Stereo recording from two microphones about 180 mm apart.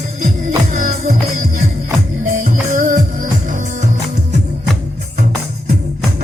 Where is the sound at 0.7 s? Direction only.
40° right (ahead or behind).